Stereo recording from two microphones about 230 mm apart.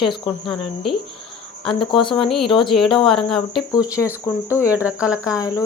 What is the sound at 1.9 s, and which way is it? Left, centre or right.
Speech, left.